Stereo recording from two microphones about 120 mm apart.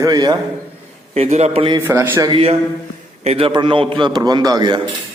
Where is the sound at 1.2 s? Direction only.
65° right (ahead or behind).